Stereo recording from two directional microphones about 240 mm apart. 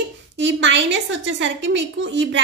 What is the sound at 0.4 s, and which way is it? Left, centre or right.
A woman's voice, right.